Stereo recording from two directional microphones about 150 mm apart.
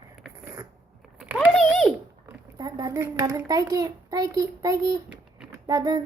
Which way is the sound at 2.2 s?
25° right (ahead or behind).